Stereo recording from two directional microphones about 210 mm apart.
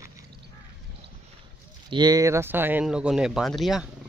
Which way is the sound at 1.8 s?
20° right (ahead or behind).